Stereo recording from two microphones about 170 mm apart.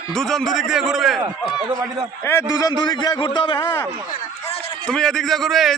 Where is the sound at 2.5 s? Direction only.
20° left (ahead or behind).